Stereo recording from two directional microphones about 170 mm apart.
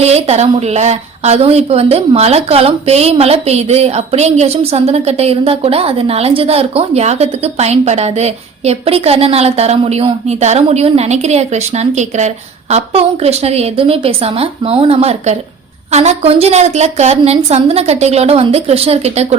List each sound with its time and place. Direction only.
0.0 s speech: 40° right (ahead or behind)